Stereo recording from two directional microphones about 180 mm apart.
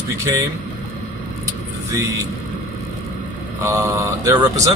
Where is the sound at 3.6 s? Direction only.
20° right (ahead or behind).